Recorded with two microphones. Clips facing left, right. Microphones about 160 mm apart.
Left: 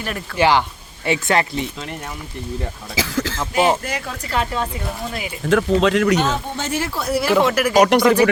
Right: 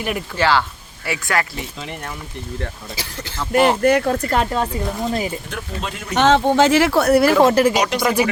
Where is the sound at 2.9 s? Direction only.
90° left.